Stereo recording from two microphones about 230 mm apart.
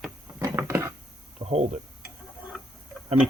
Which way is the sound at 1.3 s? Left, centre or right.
Right.